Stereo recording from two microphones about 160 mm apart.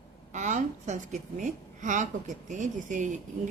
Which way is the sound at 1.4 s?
50° right (ahead or behind).